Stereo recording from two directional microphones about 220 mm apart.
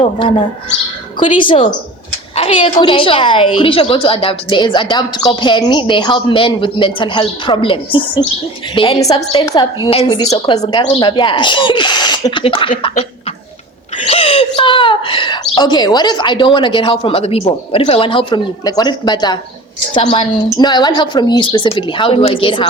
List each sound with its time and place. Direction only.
0.0 s a woman's voice: 20° left (ahead or behind)